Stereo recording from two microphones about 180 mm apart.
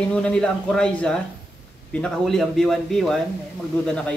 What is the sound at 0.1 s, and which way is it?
A man's voice, 5° left (ahead or behind).